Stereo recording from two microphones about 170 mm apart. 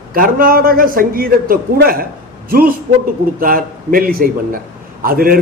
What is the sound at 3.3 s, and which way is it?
A man's voice, 55° right (ahead or behind).